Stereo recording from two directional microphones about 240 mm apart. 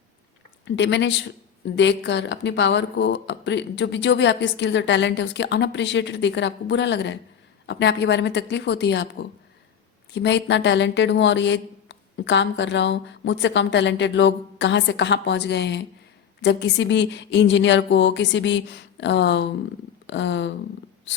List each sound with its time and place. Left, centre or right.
0.6 s a woman's voice: left
10.2 s a woman's voice: left